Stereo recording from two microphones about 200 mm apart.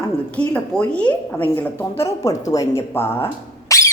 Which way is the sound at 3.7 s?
15° left (ahead or behind).